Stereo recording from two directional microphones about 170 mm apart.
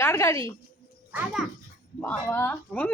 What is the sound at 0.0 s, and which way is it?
Speech, 15° left (ahead or behind).